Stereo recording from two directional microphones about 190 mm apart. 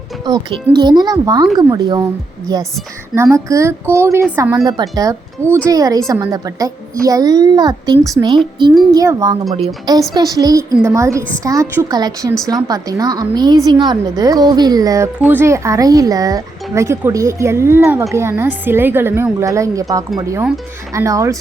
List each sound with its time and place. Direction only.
0.3 s a woman's voice: 20° right (ahead or behind)
20.9 s speech: 15° right (ahead or behind)